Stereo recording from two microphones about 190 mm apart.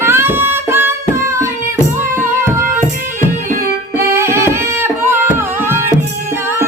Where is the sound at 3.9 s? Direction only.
15° right (ahead or behind).